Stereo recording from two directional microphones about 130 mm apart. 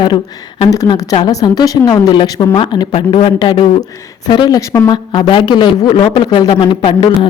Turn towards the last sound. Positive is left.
turn(degrees=40)  # may be behind; listen again after turning